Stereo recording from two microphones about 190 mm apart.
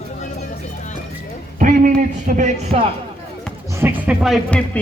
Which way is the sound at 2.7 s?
35° right (ahead or behind).